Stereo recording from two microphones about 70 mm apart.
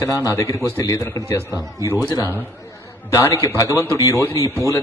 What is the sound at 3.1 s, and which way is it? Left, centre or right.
A man's voice, left.